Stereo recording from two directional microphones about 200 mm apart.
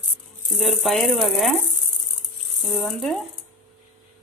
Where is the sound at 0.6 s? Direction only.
Centre (ahead or behind).